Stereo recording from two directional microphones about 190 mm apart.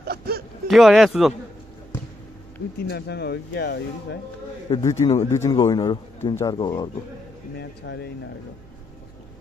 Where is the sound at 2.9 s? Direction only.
60° left (ahead or behind).